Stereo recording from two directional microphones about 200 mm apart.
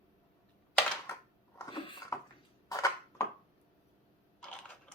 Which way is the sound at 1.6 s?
20° left (ahead or behind).